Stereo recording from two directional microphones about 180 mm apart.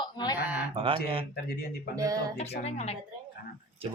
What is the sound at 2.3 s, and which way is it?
Speech, 35° left (ahead or behind).